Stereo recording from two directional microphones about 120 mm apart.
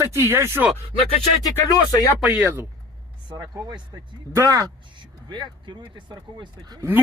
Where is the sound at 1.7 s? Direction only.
30° left (ahead or behind).